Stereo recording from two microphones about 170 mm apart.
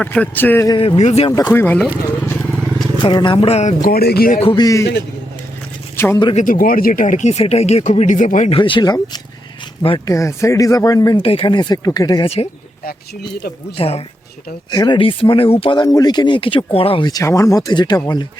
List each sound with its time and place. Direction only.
0.0 s speech: 10° left (ahead or behind)
0.7 s speech: 35° left (ahead or behind)
1.5 s speech: 10° left (ahead or behind)
2.2 s vehicle: 10° left (ahead or behind)
3.0 s speech: 25° left (ahead or behind)
3.8 s speech: 65° left (ahead or behind)
4.3 s speech: 35° left (ahead or behind)
6.3 s speech: 50° left (ahead or behind)
8.4 s speech: 30° left (ahead or behind)
13.3 s speech: 70° left (ahead or behind)
13.7 s speech: 35° left (ahead or behind)
14.7 s speech: 25° left (ahead or behind)